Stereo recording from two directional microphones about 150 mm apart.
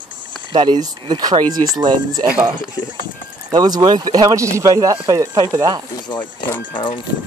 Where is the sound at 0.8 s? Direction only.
25° right (ahead or behind).